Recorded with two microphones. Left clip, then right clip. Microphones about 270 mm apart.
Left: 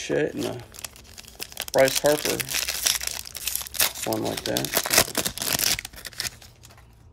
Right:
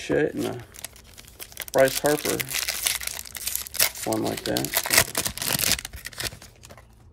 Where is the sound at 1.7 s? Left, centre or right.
Centre.